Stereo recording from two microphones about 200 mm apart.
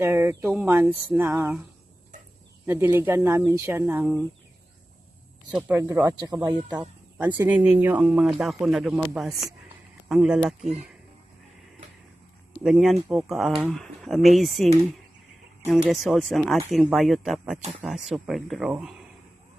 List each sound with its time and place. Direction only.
0.0 s speech: 10° right (ahead or behind)
2.6 s speech: 10° right (ahead or behind)
5.5 s speech: 10° right (ahead or behind)
6.7 s speech: 5° right (ahead or behind)
12.6 s speech: centre (ahead or behind)